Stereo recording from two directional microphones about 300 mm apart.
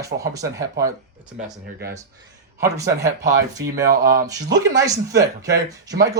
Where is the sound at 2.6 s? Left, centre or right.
Centre.